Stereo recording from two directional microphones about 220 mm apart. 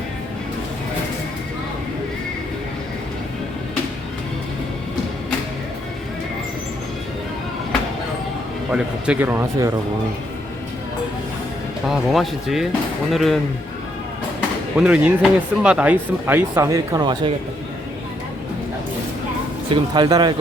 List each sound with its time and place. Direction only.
8.7 s speech: 5° right (ahead or behind)
11.9 s speech: centre (ahead or behind)
14.8 s speech: 5° right (ahead or behind); by 17.3 s 20° right (ahead or behind)
19.7 s speech: 20° right (ahead or behind)